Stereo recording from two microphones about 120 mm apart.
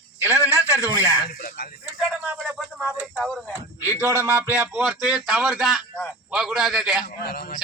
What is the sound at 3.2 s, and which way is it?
Speech, centre (ahead or behind).